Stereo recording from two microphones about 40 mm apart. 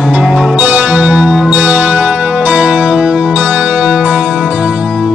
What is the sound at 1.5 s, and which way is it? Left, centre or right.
Music, right.